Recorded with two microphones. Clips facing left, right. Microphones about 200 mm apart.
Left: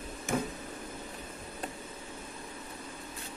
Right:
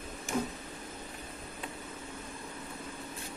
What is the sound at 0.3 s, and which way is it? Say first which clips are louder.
Tick-tock: left 1 dB; 55° left (ahead or behind).